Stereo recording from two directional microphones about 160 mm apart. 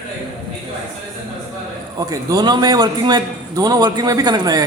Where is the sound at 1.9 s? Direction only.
20° right (ahead or behind).